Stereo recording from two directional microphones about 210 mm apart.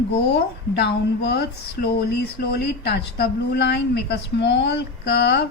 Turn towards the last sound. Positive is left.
turn(degrees=50)  # may be behind; listen again after turning